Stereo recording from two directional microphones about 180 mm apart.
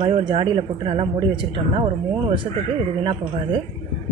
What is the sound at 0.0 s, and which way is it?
Speech, 30° right (ahead or behind).